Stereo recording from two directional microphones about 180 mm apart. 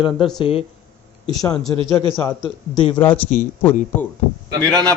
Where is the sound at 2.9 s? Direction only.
10° left (ahead or behind).